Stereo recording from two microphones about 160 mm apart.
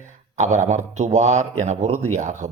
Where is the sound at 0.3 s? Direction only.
45° right (ahead or behind).